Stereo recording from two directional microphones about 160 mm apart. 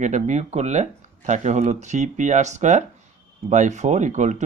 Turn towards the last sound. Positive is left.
turn(degrees=-45)  # may be behind; listen again after turning